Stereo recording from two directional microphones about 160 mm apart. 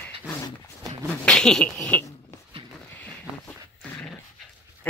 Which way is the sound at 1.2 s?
5° left (ahead or behind).